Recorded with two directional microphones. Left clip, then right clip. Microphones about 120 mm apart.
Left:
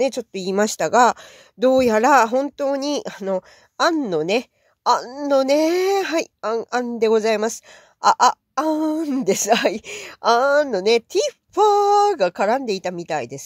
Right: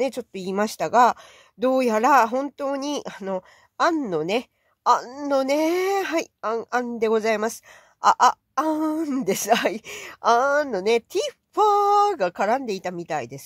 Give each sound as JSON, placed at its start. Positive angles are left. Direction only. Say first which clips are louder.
{"t": 0.0, "sound": "speech", "louder": "left 4 dB", "side_deg": 35}